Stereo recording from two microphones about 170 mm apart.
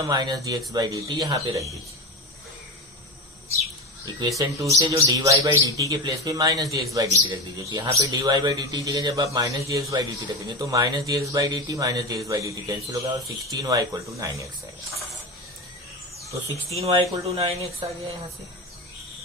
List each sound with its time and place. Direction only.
0.0 s a man's voice: 20° right (ahead or behind)
4.2 s a man's voice: 20° right (ahead or behind)
16.7 s speech: 35° right (ahead or behind)